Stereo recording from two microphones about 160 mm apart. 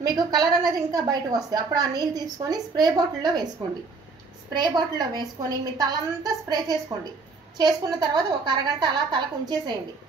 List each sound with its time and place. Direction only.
0.0 s a woman's voice: 25° right (ahead or behind)